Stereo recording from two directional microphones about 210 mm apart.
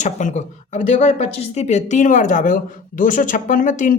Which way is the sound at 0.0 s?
35° left (ahead or behind).